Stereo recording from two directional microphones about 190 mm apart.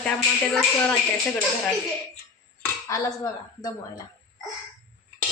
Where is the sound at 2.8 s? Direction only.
15° left (ahead or behind).